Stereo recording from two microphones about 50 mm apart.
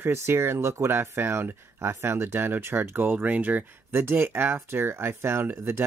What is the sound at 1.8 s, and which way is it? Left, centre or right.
Speech, right.